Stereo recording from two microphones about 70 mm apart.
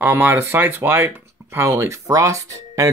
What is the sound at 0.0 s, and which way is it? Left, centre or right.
Speech, right.